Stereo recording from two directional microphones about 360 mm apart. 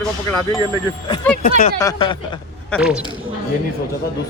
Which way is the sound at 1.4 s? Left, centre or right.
Left.